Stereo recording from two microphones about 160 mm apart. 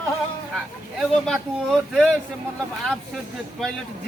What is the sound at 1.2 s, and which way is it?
Speech, centre (ahead or behind).